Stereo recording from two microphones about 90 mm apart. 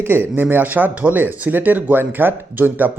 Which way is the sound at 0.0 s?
25° right (ahead or behind).